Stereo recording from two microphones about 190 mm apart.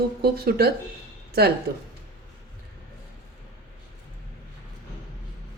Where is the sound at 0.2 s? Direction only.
55° right (ahead or behind).